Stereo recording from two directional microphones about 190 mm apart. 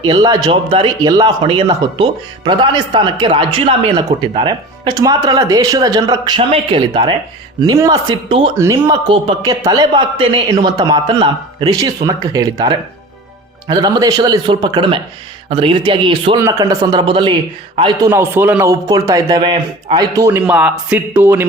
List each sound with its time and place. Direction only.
0.0 s speech: 20° right (ahead or behind)
18.1 s speech: 10° right (ahead or behind)